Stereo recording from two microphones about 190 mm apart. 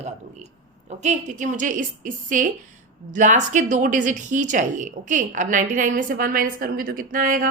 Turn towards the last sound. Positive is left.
turn(degrees=-45)  # may be behind; listen again after turning